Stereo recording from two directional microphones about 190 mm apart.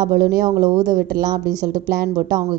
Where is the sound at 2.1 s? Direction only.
20° right (ahead or behind).